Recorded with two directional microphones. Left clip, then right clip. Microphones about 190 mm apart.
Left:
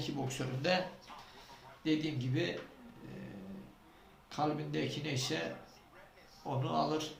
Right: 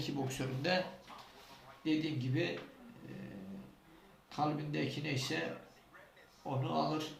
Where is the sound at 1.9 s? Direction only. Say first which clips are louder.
Left 1 dB; 15° left (ahead or behind).